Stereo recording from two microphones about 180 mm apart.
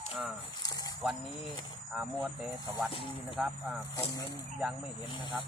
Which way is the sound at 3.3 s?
Centre (ahead or behind).